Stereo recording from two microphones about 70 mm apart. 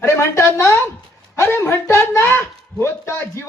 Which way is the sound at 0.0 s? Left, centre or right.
Left.